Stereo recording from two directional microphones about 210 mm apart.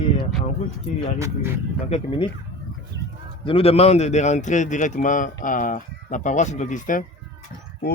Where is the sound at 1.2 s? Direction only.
10° right (ahead or behind).